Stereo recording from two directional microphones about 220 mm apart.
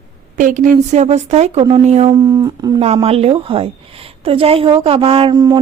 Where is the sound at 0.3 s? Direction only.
35° right (ahead or behind).